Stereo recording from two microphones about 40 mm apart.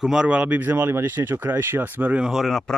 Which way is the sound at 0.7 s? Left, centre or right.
Right.